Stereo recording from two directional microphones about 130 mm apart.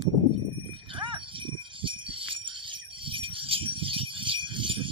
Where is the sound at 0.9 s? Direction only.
40° right (ahead or behind).